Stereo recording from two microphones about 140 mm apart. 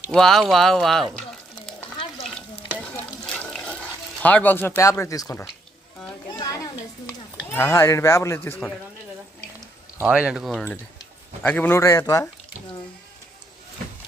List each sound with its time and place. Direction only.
0.1 s speech: 5° left (ahead or behind)
1.3 s stir: 5° left (ahead or behind)
3.2 s water: 5° left (ahead or behind)
4.2 s speech: 10° left (ahead or behind)
4.8 s speech: 20° left (ahead or behind)
7.5 s speech: 20° left (ahead or behind)
10.0 s speech: 10° right (ahead or behind)
11.4 s speech: 10° left (ahead or behind)